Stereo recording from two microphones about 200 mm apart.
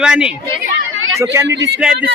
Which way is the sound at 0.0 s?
5° right (ahead or behind).